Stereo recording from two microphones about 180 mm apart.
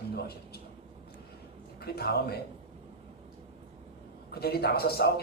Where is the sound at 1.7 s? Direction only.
60° left (ahead or behind).